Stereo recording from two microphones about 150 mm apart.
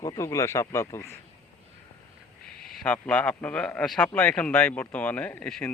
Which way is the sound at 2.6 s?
10° left (ahead or behind).